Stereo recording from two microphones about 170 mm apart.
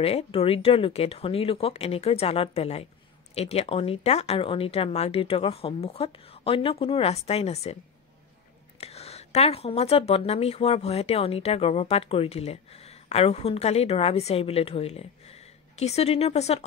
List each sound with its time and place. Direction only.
0.0 s speech: 35° left (ahead or behind)
8.7 s speech: 35° left (ahead or behind)